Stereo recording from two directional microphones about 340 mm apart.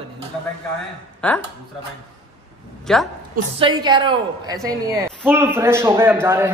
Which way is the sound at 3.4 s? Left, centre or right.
Right.